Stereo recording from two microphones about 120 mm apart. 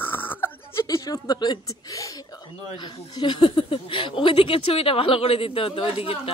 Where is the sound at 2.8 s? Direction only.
40° left (ahead or behind).